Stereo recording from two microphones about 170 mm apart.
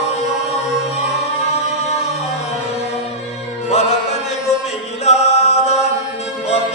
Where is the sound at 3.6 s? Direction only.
40° left (ahead or behind).